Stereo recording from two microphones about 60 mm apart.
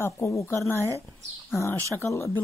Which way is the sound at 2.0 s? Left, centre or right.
Left.